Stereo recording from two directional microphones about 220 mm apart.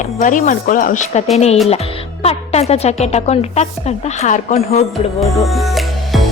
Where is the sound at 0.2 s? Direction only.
35° left (ahead or behind).